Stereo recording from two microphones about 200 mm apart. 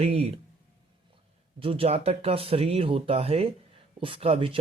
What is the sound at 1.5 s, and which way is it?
Speech, 25° right (ahead or behind).